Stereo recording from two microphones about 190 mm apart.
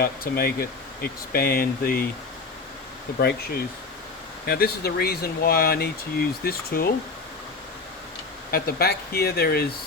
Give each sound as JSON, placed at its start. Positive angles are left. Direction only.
{"t": 0.0, "sound": "speech", "side_deg": 50}
{"t": 3.2, "sound": "speech", "side_deg": 55}
{"t": 8.4, "sound": "speech", "side_deg": 55}